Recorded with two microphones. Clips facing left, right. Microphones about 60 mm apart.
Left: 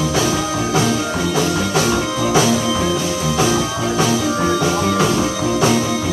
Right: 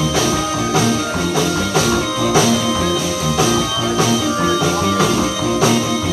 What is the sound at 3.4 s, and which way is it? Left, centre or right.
Music, left.